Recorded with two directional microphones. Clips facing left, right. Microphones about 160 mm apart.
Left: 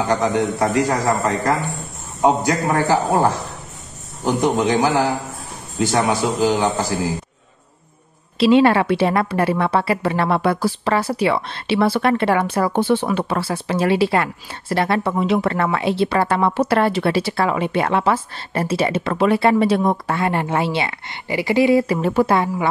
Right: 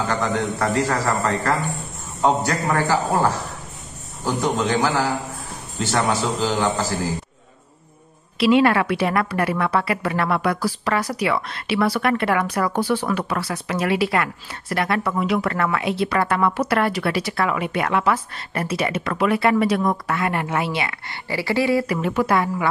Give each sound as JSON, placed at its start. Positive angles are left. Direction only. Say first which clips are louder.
{"t": 0.1, "sound": "a man's voice", "louder": "left 4 dB", "side_deg": 15}
{"t": 8.4, "sound": "a woman's voice", "louder": "left 3 dB", "side_deg": 25}